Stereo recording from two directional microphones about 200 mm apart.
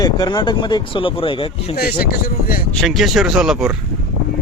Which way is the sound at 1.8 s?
50° left (ahead or behind).